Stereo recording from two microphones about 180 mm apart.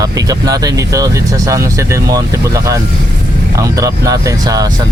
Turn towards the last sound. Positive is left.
turn(degrees=-20)  # may be behind; listen again after turning